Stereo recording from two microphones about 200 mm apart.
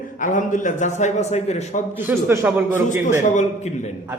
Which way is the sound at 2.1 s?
10° right (ahead or behind).